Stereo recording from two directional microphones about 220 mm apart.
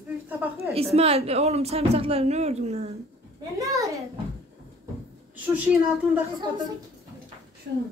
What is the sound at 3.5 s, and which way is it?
Speech, 15° right (ahead or behind).